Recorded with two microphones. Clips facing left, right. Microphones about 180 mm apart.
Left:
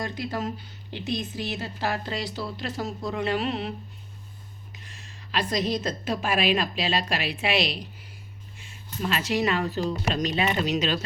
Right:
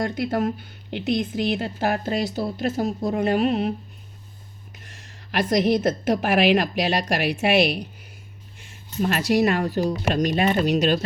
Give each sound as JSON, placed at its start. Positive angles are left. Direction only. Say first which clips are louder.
{"t": 0.0, "sound": "a woman's voice", "louder": "right 7 dB", "side_deg": -55}
{"t": 5.3, "sound": "a woman's voice", "louder": "right 7 dB", "side_deg": -65}
{"t": 7.2, "sound": "a woman's voice", "louder": "right 7 dB", "side_deg": -55}